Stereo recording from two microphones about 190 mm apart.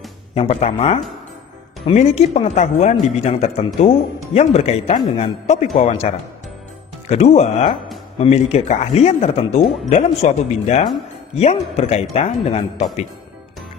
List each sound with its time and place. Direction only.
0.3 s speech: 35° left (ahead or behind)